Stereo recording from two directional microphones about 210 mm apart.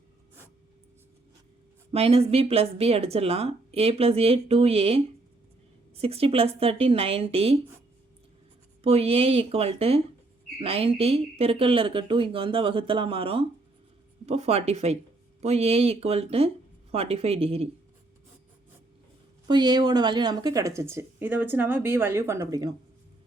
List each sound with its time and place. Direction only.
1.9 s speech: 30° right (ahead or behind)
8.8 s speech: 30° right (ahead or behind)
19.5 s speech: 20° right (ahead or behind)